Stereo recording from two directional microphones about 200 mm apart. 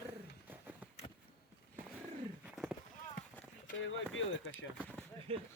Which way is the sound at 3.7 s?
70° left (ahead or behind).